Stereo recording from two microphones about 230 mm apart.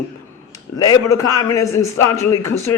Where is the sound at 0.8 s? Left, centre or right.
Centre.